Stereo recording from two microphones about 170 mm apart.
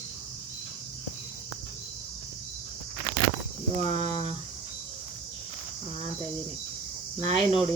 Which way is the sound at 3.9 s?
40° right (ahead or behind).